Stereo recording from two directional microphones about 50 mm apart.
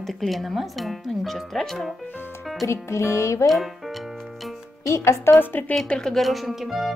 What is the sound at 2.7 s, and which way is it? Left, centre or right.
Music, left.